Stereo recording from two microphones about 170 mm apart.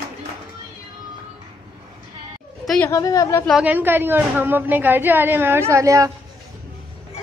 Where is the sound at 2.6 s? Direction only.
5° left (ahead or behind).